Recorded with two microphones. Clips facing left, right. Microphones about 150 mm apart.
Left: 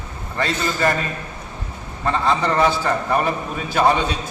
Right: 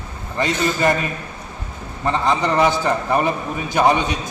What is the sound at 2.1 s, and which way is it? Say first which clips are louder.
A man's voice: right 1 dB; 15° right (ahead or behind).